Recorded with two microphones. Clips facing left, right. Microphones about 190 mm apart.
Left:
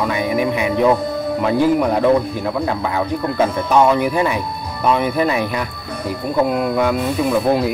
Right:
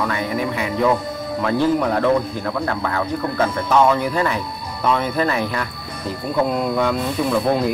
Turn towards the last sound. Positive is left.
turn(degrees=5)  # may be behind; listen again after turning